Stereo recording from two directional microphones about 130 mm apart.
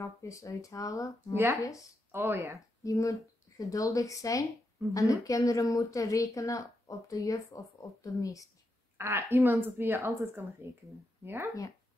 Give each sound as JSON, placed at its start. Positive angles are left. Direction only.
{"t": 0.0, "sound": "a woman's voice", "side_deg": 25}
{"t": 1.3, "sound": "speech", "side_deg": -20}
{"t": 2.8, "sound": "a woman's voice", "side_deg": 25}
{"t": 8.9, "sound": "a woman's voice", "side_deg": -20}